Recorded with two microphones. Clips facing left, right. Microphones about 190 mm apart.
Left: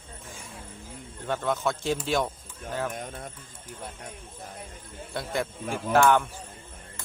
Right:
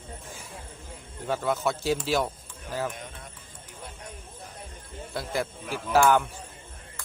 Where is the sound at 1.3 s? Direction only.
5° right (ahead or behind).